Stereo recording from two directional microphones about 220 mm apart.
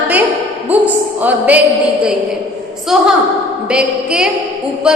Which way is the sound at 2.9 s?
Centre (ahead or behind).